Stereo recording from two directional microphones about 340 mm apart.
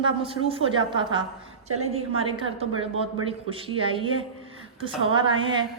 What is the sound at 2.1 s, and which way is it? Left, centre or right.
Speech, right.